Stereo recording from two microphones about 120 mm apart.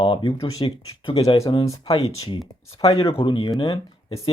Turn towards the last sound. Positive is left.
turn(degrees=50)  # may be behind; listen again after turning